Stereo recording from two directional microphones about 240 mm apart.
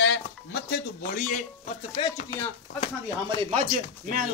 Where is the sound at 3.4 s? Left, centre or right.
Right.